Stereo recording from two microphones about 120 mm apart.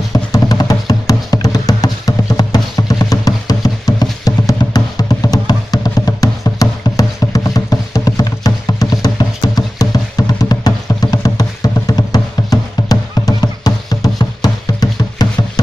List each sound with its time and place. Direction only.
0.1 s music: 30° left (ahead or behind)